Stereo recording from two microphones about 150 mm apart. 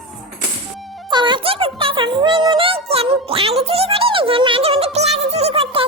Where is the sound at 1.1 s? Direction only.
30° right (ahead or behind).